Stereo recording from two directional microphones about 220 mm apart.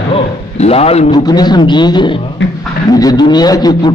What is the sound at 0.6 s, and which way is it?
A man's voice, 25° left (ahead or behind).